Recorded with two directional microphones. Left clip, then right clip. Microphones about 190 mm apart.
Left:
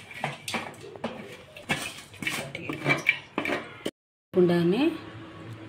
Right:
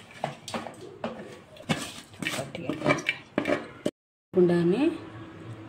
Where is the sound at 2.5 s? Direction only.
55° right (ahead or behind).